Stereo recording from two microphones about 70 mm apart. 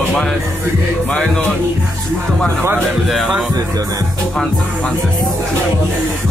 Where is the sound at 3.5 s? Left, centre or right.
Right.